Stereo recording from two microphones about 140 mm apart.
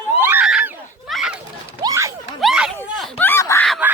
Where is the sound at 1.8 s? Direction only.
25° right (ahead or behind).